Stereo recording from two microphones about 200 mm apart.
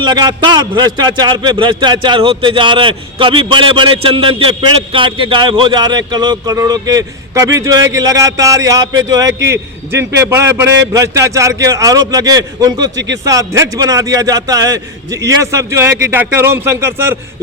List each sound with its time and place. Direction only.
0.0 s a man's voice: 20° right (ahead or behind)